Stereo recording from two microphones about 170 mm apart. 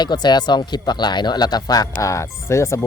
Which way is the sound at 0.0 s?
25° left (ahead or behind).